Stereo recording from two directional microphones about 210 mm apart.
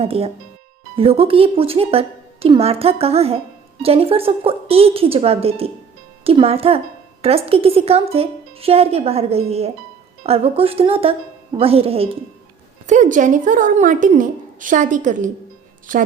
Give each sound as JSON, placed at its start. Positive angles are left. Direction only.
{"t": 0.0, "sound": "a woman's voice", "side_deg": -30}